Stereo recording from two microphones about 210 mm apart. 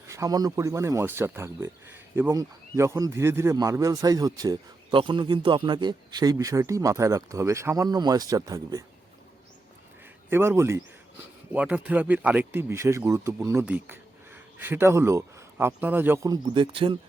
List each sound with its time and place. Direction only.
0.1 s speech: 15° right (ahead or behind)
10.2 s speech: 10° right (ahead or behind)